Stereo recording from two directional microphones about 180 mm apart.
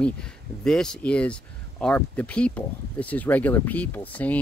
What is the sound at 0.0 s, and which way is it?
Speech, 5° left (ahead or behind).